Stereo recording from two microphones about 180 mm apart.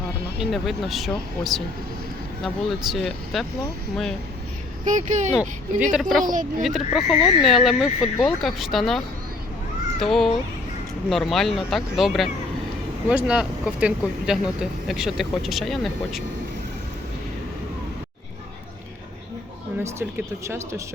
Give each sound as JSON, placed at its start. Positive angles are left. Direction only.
{"t": 0.3, "sound": "speech", "side_deg": 0}
{"t": 4.9, "sound": "speech", "side_deg": -40}
{"t": 5.9, "sound": "speech", "side_deg": 0}
{"t": 10.0, "sound": "speech", "side_deg": 0}
{"t": 19.8, "sound": "speech", "side_deg": -15}